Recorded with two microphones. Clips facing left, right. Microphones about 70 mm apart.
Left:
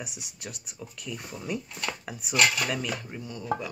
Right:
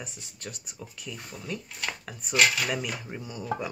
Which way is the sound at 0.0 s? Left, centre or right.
Centre.